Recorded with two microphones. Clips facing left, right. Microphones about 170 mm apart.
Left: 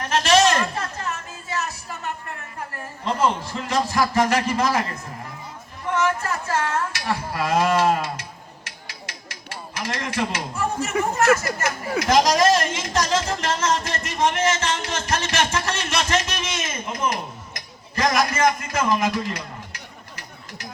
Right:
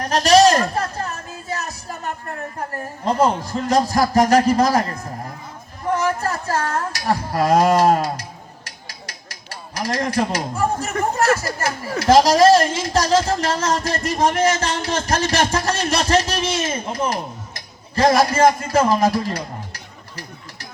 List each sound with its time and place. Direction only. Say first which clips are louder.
0.0 s speech: right 5 dB; 35° right (ahead or behind)